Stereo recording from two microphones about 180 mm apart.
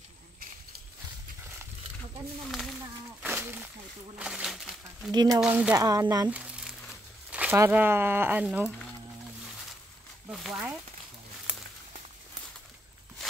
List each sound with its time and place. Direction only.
3.2 s a sound: 10° right (ahead or behind)
4.2 s speech: 5° right (ahead or behind)
5.1 s speech: 20° right (ahead or behind)
5.4 s speech: 10° right (ahead or behind)
10.3 s speech: centre (ahead or behind)
11.5 s walk: 5° right (ahead or behind)
13.2 s walk: centre (ahead or behind)